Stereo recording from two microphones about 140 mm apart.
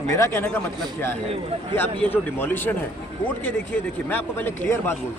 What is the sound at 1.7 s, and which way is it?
Speech, 15° left (ahead or behind).